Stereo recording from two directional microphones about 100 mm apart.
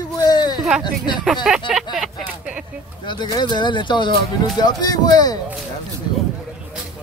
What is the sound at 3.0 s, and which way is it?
Speech, 50° left (ahead or behind).